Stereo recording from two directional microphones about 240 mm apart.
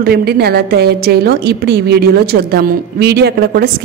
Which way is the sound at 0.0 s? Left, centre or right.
Right.